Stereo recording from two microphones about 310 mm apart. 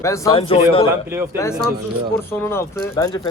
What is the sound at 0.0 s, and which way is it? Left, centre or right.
Speech, centre.